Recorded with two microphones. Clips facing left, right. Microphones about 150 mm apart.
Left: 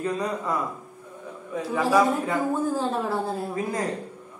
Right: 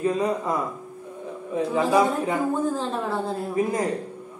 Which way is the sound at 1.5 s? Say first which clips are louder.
Right 2 dB; 20° right (ahead or behind).